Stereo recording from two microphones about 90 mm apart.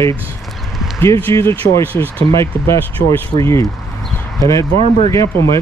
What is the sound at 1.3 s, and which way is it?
Speech, 30° left (ahead or behind).